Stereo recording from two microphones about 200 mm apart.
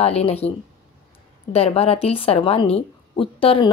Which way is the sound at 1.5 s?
30° left (ahead or behind).